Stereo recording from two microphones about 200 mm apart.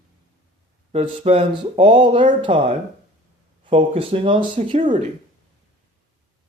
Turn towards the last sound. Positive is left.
turn(degrees=-25)  # may be behind; listen again after turning